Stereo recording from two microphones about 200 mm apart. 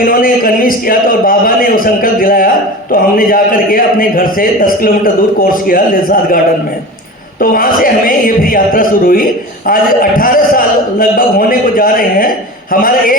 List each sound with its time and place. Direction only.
0.0 s a man's voice: 45° left (ahead or behind)